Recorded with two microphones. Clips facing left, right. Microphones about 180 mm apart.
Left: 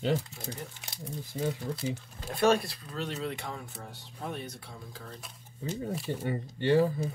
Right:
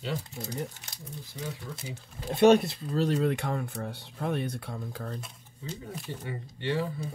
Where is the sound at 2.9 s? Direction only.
35° right (ahead or behind).